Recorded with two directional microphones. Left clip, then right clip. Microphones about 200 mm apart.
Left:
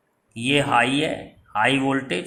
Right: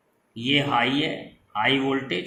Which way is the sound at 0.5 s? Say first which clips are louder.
Left 3 dB; 40° left (ahead or behind).